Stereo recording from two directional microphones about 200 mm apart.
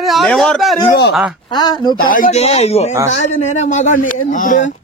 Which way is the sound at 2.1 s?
40° left (ahead or behind).